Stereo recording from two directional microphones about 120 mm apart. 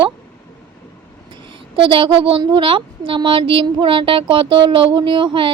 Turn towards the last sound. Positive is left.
turn(degrees=-45)  # may be behind; listen again after turning